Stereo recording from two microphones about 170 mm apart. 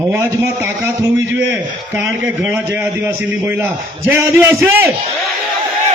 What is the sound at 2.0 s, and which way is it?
A man's voice, 10° right (ahead or behind).